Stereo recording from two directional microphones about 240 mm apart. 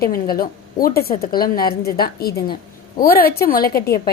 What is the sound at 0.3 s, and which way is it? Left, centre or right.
A woman's voice, left.